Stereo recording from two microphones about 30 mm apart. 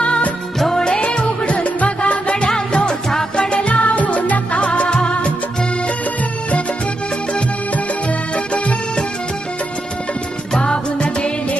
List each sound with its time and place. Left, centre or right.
0.7 s music: left
2.0 s music: left
3.7 s music: left
10.5 s music: left